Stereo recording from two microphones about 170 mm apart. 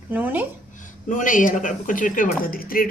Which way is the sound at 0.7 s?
50° left (ahead or behind).